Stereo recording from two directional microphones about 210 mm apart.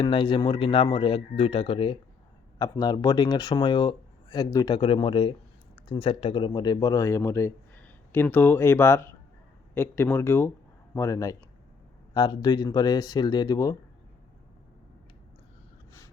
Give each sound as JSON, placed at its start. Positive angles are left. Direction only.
{"t": 0.0, "sound": "speech", "side_deg": 25}